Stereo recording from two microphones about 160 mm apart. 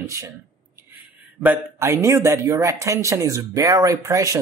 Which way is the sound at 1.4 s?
15° right (ahead or behind).